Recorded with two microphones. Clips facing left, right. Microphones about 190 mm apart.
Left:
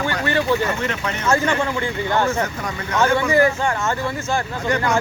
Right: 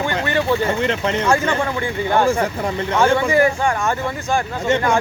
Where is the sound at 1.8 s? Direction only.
15° right (ahead or behind).